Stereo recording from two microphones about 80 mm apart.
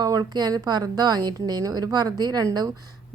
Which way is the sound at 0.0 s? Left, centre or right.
Right.